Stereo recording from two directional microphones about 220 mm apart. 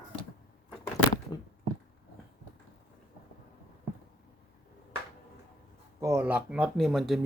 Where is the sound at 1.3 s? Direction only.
15° left (ahead or behind).